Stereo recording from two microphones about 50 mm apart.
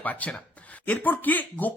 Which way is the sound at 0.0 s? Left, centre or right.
Left.